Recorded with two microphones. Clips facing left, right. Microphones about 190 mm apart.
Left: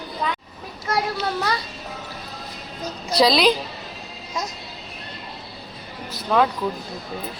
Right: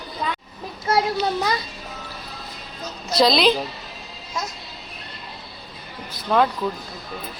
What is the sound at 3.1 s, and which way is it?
Speech, 10° left (ahead or behind).